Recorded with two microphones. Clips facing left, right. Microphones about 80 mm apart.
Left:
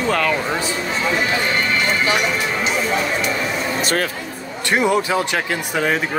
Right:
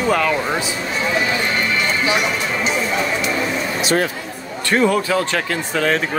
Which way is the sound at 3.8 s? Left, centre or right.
Left.